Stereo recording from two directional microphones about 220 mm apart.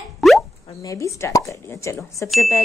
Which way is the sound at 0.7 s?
15° left (ahead or behind).